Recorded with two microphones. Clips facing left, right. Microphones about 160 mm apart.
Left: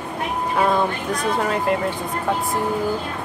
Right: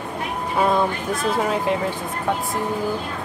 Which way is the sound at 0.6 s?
Centre (ahead or behind).